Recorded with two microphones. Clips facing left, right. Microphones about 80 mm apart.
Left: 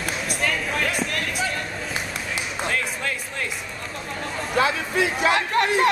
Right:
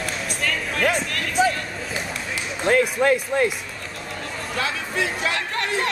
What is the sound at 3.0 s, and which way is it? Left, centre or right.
Speech, right.